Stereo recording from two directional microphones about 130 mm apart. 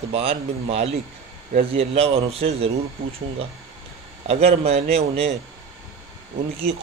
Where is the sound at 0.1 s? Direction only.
50° right (ahead or behind).